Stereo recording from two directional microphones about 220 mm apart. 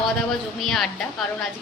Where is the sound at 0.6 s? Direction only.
Centre (ahead or behind).